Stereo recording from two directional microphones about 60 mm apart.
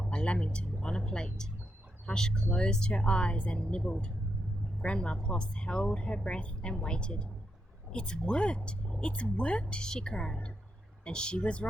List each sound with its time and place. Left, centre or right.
0.0 s speech: centre